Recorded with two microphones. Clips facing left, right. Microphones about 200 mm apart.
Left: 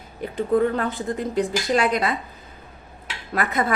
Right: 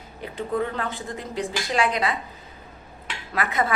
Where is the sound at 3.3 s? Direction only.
45° left (ahead or behind).